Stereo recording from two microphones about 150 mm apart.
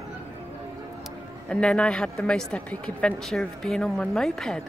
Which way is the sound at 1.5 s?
5° left (ahead or behind).